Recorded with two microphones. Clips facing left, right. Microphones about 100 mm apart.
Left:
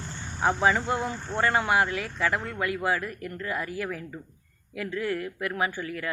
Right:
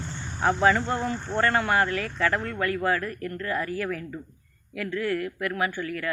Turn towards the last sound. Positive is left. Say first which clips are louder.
# right 1 dB
turn(degrees=20)  # may be behind; listen again after turning